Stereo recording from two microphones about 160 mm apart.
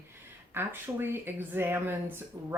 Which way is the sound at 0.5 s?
15° right (ahead or behind).